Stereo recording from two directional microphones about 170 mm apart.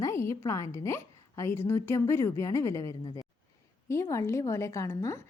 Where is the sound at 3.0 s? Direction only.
25° left (ahead or behind).